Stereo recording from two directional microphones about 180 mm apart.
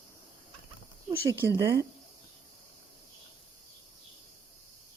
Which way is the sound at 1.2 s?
15° right (ahead or behind).